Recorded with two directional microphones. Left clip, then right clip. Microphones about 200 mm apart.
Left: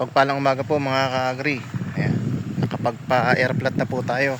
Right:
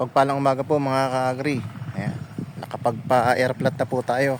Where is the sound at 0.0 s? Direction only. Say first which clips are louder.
Left 1 dB; 10° right (ahead or behind).